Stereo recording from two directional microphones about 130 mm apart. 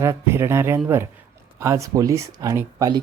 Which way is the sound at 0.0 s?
20° right (ahead or behind).